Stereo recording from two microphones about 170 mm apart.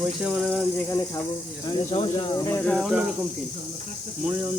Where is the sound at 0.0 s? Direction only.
5° right (ahead or behind).